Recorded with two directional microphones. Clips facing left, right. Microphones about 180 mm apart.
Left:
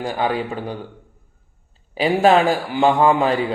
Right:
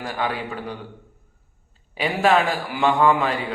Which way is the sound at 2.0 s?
30° left (ahead or behind).